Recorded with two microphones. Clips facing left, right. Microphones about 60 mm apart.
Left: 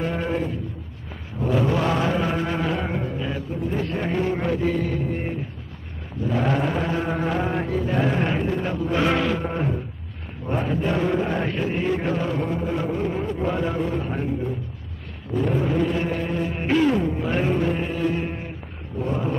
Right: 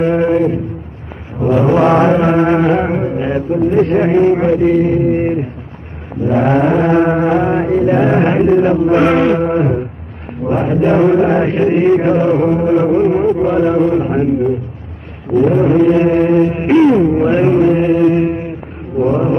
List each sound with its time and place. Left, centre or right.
0.0 s a sound: right
1.4 s chant: right
3.5 s music: right
5.1 s a sound: right
6.2 s chant: right
8.6 s music: right
9.5 s a sound: right
10.5 s mantra: right
11.1 s music: right
17.9 s mantra: right
18.9 s vehicle: right